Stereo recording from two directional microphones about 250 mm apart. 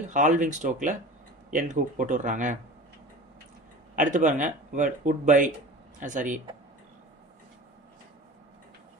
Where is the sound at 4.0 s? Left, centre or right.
Right.